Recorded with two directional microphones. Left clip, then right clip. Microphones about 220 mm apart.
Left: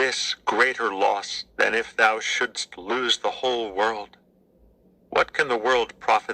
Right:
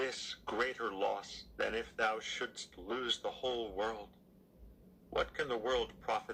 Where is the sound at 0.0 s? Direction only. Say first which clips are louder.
Left 16 dB; 35° left (ahead or behind).